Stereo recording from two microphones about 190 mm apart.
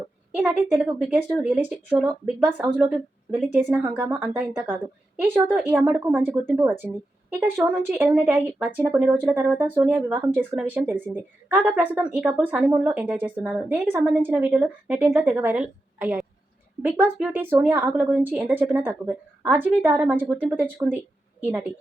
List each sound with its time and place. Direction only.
0.3 s a woman's voice: 5° right (ahead or behind)
7.6 s a woman's voice: 10° right (ahead or behind)